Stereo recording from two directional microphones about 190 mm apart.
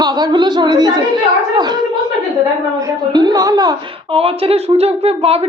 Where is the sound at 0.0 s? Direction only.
20° right (ahead or behind).